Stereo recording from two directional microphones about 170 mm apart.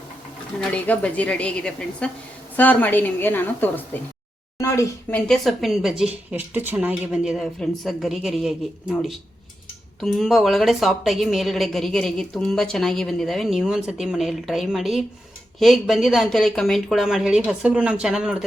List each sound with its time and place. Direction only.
0.6 s a woman's voice: 5° left (ahead or behind)
5.3 s a woman's voice: centre (ahead or behind)